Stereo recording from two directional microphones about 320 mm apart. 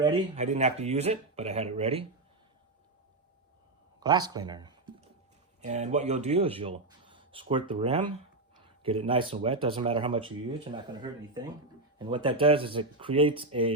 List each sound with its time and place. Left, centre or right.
0.0 s speech: right
4.0 s speech: centre